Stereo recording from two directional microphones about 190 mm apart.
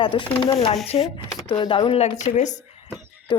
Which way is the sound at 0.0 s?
25° left (ahead or behind).